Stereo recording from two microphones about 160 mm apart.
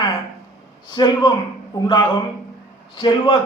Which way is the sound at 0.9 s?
25° left (ahead or behind).